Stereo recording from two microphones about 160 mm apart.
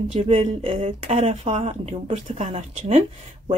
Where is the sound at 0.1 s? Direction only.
35° right (ahead or behind).